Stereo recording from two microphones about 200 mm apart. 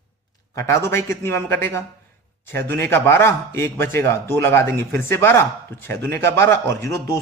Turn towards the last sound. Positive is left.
turn(degrees=15)  # may be behind; listen again after turning